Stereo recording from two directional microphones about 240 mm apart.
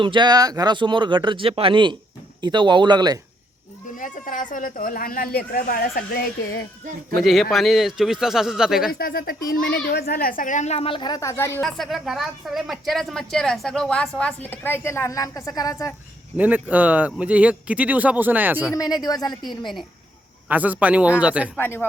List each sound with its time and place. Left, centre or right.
0.0 s speech: centre
3.9 s speech: left
7.2 s a child's voice: centre
8.9 s a child's voice: left; by 15.9 s centre
16.4 s speech: centre
18.7 s a woman's voice: centre
20.5 s a child's voice: centre
21.5 s a woman's voice: centre